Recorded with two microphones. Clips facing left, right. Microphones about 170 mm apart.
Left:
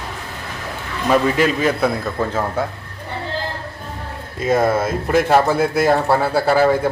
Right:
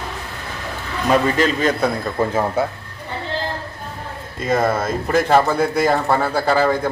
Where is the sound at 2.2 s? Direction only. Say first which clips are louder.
Right 5 dB; 15° right (ahead or behind).